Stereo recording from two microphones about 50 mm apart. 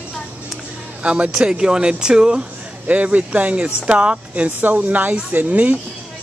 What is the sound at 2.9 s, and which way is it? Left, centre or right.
Speech, right.